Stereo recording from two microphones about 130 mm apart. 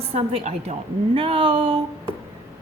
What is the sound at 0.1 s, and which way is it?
Speech, 50° right (ahead or behind).